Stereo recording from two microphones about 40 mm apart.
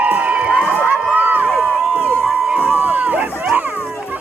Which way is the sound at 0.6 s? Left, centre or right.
Right.